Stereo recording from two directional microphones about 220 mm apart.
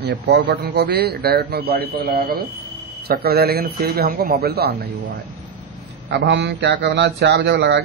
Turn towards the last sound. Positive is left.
turn(degrees=-50)  # may be behind; listen again after turning